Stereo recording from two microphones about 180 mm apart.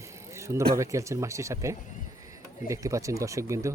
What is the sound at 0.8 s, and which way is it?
Speech, 15° right (ahead or behind).